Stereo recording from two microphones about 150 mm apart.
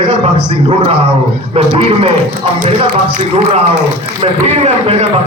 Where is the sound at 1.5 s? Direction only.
40° right (ahead or behind).